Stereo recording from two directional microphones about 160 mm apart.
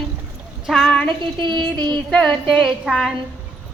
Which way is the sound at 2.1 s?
5° left (ahead or behind).